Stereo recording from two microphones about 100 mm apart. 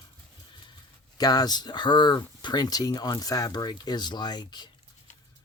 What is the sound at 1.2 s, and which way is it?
Speech, 40° left (ahead or behind).